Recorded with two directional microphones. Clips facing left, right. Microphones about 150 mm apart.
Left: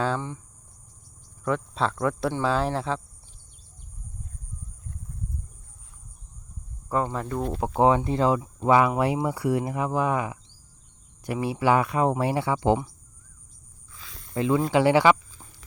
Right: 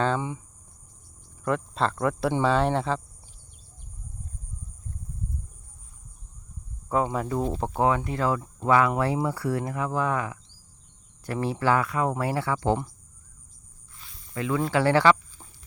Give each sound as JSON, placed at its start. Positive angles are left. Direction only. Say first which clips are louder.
{"t": 0.2, "sound": "speech", "louder": "right 3 dB", "side_deg": -15}
{"t": 1.5, "sound": "speech", "louder": "even", "side_deg": 0}
{"t": 7.0, "sound": "speech", "louder": "right 2 dB", "side_deg": -5}
{"t": 7.8, "sound": "speech", "louder": "left 4 dB", "side_deg": 25}
{"t": 14.3, "sound": "speech", "louder": "left 3 dB", "side_deg": 25}